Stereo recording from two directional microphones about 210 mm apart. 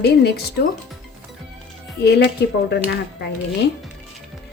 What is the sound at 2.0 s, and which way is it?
Speech, 50° left (ahead or behind).